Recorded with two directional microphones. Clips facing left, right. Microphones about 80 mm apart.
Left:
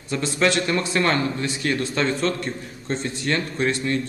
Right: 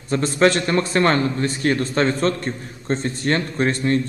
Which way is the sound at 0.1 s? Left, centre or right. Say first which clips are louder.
Right 4 dB; right.